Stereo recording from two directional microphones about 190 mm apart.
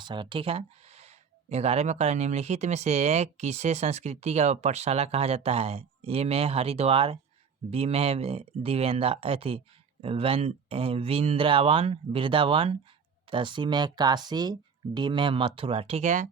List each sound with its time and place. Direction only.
0.0 s speech: 25° right (ahead or behind); by 16.3 s 40° right (ahead or behind)